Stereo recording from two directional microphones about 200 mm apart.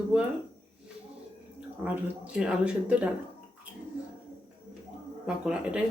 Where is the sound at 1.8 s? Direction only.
5° right (ahead or behind).